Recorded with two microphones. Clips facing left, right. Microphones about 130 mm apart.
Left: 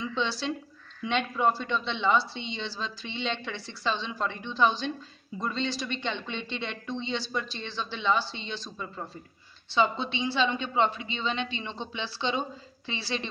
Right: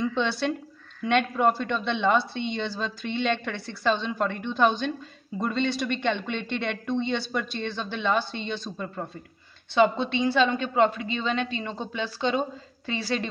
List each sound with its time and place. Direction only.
0.0 s a woman's voice: 50° right (ahead or behind)